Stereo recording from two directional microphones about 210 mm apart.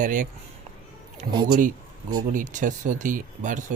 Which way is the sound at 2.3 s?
40° right (ahead or behind).